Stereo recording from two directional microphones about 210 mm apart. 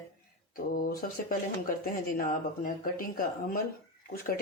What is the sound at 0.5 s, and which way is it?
Speech, 45° left (ahead or behind).